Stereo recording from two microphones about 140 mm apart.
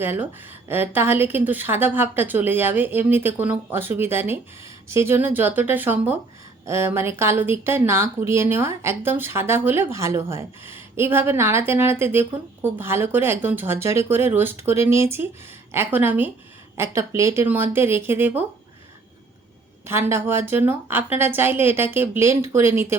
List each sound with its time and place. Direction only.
0.0 s a woman's voice: 15° right (ahead or behind)
19.8 s a woman's voice: 20° right (ahead or behind)